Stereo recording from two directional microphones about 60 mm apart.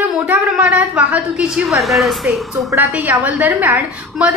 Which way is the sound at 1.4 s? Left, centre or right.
Centre.